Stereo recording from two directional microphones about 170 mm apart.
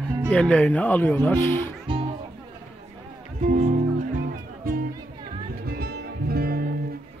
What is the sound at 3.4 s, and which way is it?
Music, 45° right (ahead or behind).